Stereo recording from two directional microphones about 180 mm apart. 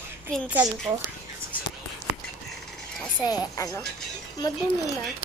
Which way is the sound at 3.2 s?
20° left (ahead or behind).